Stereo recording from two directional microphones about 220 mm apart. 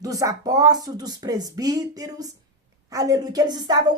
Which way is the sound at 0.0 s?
15° right (ahead or behind).